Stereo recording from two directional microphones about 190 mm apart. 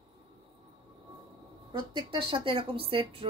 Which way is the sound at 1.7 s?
25° right (ahead or behind).